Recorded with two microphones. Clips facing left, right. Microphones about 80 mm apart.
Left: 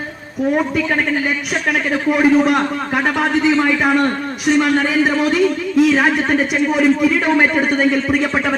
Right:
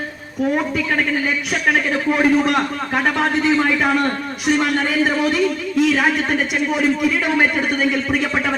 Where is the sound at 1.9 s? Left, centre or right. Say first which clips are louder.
Left 6 dB; centre.